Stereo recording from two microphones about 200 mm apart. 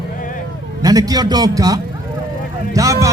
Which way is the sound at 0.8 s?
20° right (ahead or behind).